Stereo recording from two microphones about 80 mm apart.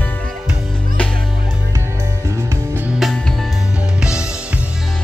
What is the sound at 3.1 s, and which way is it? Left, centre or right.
Music, centre.